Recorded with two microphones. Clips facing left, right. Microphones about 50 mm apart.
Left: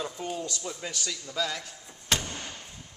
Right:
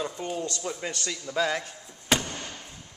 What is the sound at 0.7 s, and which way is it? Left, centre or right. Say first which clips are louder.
Speech: right 4 dB; centre.